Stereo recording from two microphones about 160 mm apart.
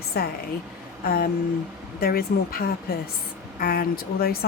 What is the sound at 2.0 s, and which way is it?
Speech, 70° left (ahead or behind).